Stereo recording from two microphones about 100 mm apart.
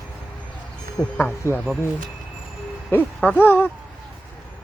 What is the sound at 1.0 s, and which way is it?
Speech, 15° left (ahead or behind).